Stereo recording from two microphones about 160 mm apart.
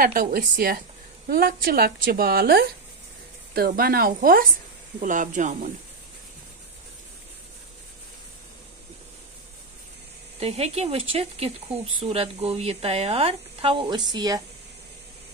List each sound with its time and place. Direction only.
0.0 s a woman's voice: 65° right (ahead or behind)
10.4 s speech: 40° right (ahead or behind); by 14.4 s 25° right (ahead or behind)